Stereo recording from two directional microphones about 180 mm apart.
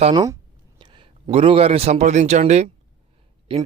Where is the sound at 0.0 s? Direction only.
25° right (ahead or behind).